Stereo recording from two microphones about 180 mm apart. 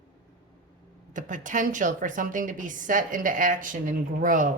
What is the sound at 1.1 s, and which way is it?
A woman's voice, 45° right (ahead or behind).